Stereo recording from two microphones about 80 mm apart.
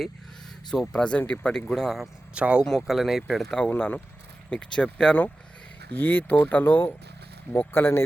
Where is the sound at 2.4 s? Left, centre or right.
Centre.